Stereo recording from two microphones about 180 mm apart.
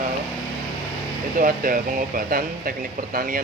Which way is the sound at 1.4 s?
50° right (ahead or behind).